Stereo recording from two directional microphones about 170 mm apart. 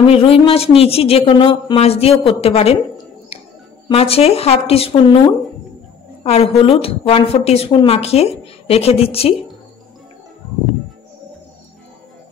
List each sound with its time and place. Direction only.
0.0 s a woman's voice: 35° left (ahead or behind)
3.9 s a woman's voice: 35° left (ahead or behind)